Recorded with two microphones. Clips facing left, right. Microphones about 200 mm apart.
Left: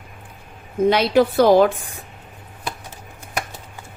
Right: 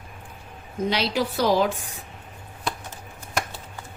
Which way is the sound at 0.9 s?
55° left (ahead or behind).